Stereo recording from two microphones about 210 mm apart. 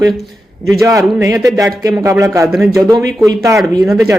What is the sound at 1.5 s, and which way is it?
A man's voice, 15° right (ahead or behind).